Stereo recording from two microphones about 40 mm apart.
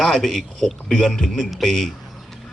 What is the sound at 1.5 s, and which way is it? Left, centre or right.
Speech, centre.